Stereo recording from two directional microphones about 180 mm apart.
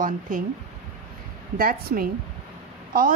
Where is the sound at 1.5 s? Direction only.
55° right (ahead or behind).